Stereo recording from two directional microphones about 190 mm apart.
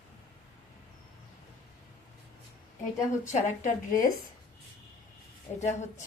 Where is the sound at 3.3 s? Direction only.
40° left (ahead or behind).